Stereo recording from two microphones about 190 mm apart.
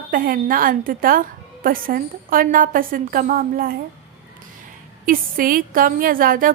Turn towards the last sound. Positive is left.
turn(degrees=-45)  # may be behind; listen again after turning